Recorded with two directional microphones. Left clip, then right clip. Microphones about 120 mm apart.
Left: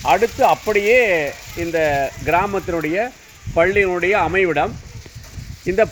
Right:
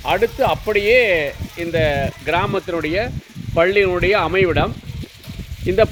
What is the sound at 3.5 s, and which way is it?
Speech, 15° right (ahead or behind).